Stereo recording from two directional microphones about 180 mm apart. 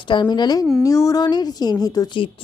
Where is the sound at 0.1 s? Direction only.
25° left (ahead or behind).